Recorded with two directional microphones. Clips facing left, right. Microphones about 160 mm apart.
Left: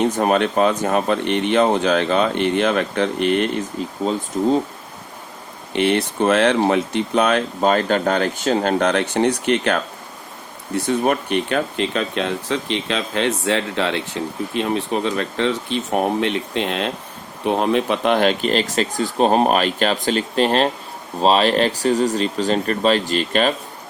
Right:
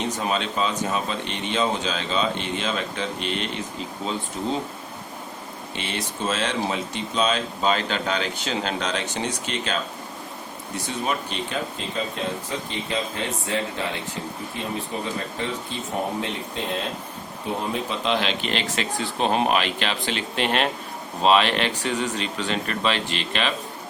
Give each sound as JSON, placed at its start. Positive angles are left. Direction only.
{"t": 0.0, "sound": "speech", "side_deg": 55}
{"t": 4.4, "sound": "speech", "side_deg": 45}
{"t": 5.7, "sound": "speech", "side_deg": 60}